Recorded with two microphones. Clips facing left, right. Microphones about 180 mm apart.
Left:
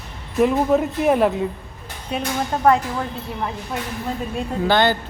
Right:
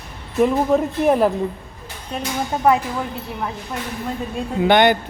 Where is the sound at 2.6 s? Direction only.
10° right (ahead or behind).